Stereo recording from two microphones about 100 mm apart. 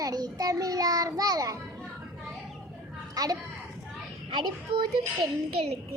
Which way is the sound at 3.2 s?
40° right (ahead or behind).